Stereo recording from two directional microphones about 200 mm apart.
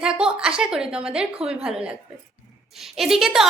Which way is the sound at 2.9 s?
Centre (ahead or behind).